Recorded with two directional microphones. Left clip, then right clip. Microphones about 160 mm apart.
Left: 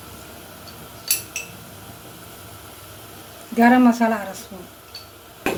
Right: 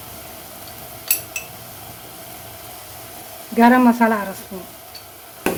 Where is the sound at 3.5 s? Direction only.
20° right (ahead or behind).